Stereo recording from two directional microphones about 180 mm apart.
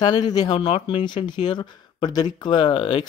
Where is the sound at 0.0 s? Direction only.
25° left (ahead or behind).